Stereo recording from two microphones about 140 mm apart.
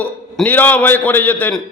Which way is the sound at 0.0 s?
10° left (ahead or behind).